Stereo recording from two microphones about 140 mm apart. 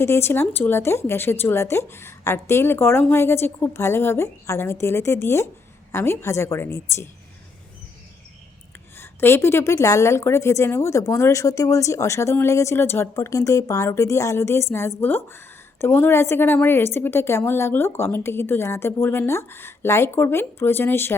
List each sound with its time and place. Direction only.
0.0 s a woman's voice: 15° left (ahead or behind)
9.0 s a woman's voice: 15° left (ahead or behind)